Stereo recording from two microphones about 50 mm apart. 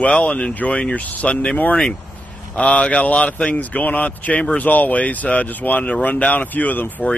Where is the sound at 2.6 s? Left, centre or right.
Left.